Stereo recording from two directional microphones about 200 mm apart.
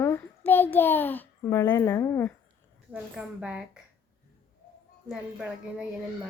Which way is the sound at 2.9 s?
5° right (ahead or behind).